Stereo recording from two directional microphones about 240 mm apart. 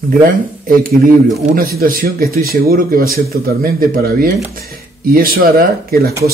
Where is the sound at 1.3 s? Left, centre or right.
Right.